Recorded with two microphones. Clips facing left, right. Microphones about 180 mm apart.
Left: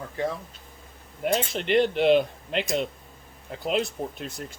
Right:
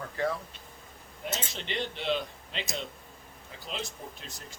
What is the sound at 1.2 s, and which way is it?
Speech, 60° left (ahead or behind).